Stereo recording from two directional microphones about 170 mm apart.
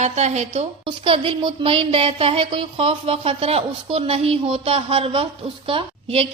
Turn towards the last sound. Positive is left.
turn(degrees=-35)  # may be behind; listen again after turning